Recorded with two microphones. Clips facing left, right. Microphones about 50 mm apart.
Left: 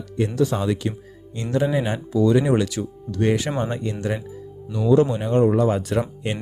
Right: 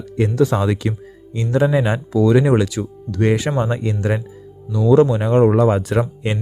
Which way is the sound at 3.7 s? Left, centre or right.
Right.